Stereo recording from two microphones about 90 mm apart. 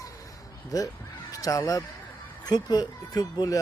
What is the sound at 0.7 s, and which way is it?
Speech, 45° left (ahead or behind).